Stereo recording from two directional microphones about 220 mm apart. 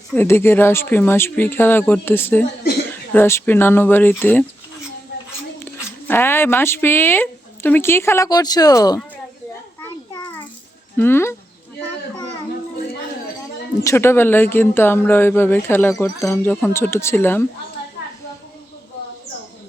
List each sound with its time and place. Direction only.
0.1 s speech: 10° left (ahead or behind)
5.5 s speech: 10° left (ahead or behind)
9.8 s children playing: 15° left (ahead or behind)
10.9 s speech: 10° left (ahead or behind)
13.8 s speech: 10° left (ahead or behind)